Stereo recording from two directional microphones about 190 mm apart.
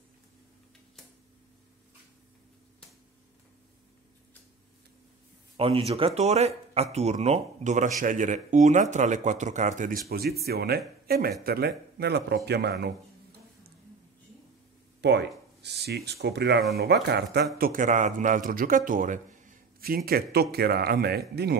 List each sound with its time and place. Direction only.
5.6 s a man's voice: 30° right (ahead or behind); by 12.9 s 60° right (ahead or behind)
15.0 s a man's voice: 65° right (ahead or behind)
17.6 s a man's voice: 45° right (ahead or behind)